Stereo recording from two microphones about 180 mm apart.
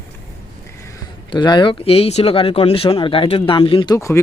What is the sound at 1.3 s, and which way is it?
Speech, 25° left (ahead or behind).